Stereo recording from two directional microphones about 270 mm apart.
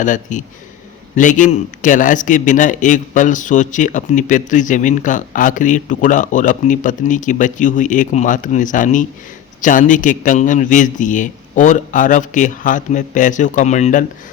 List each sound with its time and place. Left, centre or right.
0.0 s a man's voice: left